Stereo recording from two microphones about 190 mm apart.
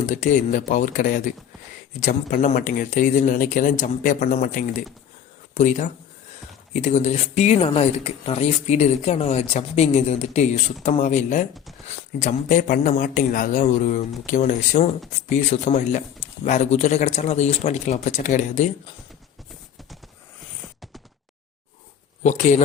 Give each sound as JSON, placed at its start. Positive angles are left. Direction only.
{"t": 0.0, "sound": "a man's voice", "side_deg": 40}
{"t": 22.2, "sound": "speech", "side_deg": 40}